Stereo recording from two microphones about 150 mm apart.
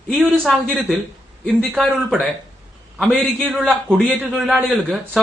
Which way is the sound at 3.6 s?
5° left (ahead or behind).